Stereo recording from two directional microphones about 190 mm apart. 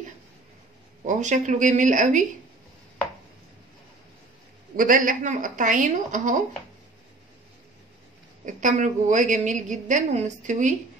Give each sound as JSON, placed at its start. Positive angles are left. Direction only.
{"t": 1.0, "sound": "a woman's voice", "side_deg": -40}
{"t": 4.7, "sound": "a woman's voice", "side_deg": -45}
{"t": 8.5, "sound": "a woman's voice", "side_deg": -40}